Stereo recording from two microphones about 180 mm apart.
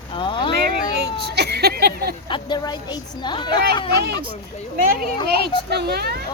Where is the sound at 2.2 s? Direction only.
25° left (ahead or behind).